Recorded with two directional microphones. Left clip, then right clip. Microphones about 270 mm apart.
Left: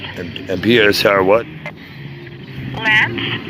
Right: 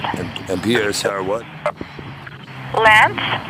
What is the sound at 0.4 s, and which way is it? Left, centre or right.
Speech, centre.